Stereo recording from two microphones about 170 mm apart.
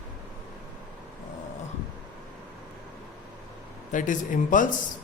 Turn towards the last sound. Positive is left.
turn(degrees=50)  # may be behind; listen again after turning